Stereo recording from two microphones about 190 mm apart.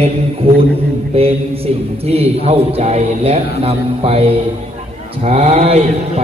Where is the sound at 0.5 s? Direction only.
30° right (ahead or behind).